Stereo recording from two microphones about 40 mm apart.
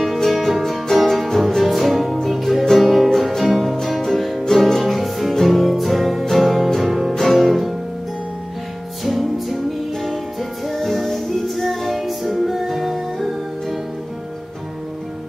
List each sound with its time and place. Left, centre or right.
0.0 s music: centre
9.0 s music: centre
10.7 s music: centre